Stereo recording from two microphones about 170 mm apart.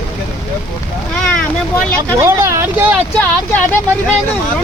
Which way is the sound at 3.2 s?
10° left (ahead or behind).